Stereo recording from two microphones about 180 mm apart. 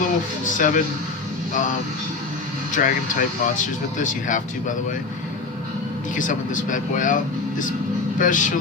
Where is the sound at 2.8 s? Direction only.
50° left (ahead or behind).